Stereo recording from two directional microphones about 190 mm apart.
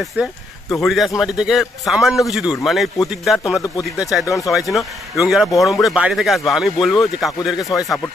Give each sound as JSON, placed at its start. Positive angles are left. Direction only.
{"t": 0.0, "sound": "a man's voice", "side_deg": 0}
{"t": 3.6, "sound": "speech", "side_deg": 20}
{"t": 4.1, "sound": "a man's voice", "side_deg": 0}
{"t": 7.6, "sound": "speech", "side_deg": 20}